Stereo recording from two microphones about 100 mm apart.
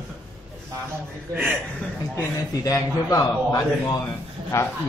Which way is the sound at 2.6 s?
35° left (ahead or behind).